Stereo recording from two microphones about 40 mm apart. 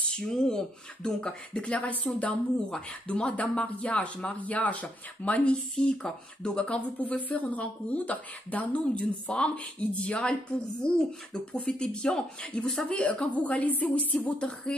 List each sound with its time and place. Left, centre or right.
0.1 s speech: centre
1.8 s speech: left
6.0 s speech: left
6.6 s speech: left